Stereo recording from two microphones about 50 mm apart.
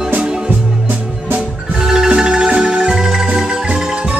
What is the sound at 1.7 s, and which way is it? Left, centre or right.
Music, centre.